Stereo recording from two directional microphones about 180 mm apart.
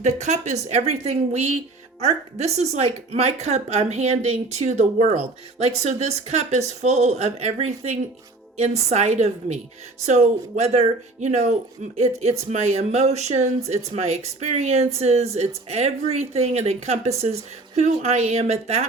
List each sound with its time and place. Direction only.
0.0 s a woman's voice: 40° right (ahead or behind)